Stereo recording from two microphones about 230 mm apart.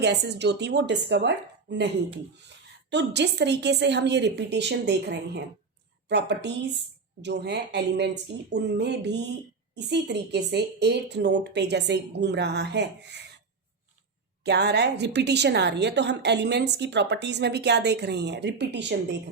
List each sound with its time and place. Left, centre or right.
0.0 s a woman's voice: right
2.9 s a woman's voice: right
14.4 s a woman's voice: right